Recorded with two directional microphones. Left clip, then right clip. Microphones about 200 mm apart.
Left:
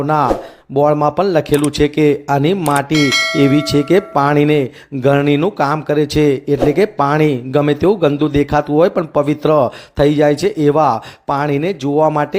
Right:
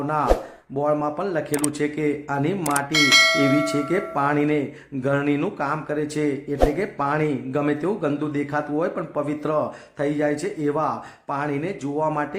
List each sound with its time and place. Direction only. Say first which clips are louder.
0.7 s a man's voice: left 10 dB; 35° left (ahead or behind)
2.9 s speech: left 2 dB; centre (ahead or behind)
3.8 s a man's voice: left 9 dB; 35° left (ahead or behind)